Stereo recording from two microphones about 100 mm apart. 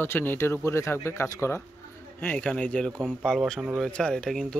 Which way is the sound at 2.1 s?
15° left (ahead or behind).